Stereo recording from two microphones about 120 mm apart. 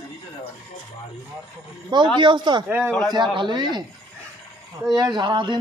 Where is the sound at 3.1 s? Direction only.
40° right (ahead or behind).